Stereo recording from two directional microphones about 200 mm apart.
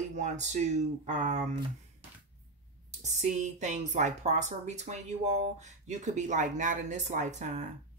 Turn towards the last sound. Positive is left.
turn(degrees=-35)  # may be behind; listen again after turning